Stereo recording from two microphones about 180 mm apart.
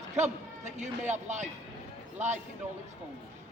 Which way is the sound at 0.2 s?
40° right (ahead or behind).